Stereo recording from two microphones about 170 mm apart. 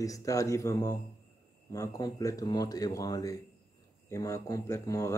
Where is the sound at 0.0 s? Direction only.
20° left (ahead or behind).